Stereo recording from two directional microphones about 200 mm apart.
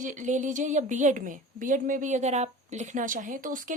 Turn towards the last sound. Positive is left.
turn(degrees=-40)  # may be behind; listen again after turning